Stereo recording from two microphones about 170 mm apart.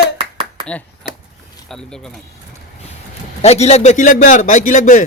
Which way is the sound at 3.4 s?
40° left (ahead or behind).